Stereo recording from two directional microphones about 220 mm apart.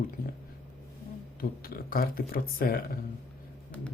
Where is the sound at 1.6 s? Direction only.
45° left (ahead or behind).